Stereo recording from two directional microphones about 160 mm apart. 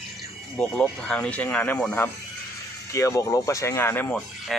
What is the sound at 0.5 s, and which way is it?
Speech, 5° left (ahead or behind).